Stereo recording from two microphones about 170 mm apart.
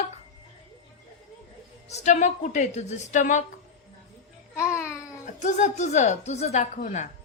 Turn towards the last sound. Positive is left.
turn(degrees=45)  # may be behind; listen again after turning